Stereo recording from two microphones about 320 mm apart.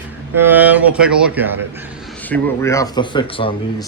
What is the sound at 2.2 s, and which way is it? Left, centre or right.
Speech, centre.